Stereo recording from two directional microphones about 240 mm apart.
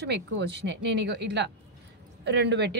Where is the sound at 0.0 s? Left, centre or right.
Right.